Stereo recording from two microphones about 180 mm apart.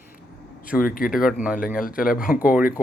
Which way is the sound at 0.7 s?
50° left (ahead or behind).